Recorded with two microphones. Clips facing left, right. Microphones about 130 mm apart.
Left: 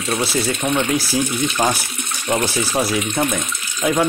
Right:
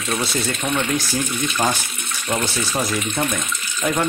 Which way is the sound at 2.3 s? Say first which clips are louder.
Left 4 dB; 10° left (ahead or behind).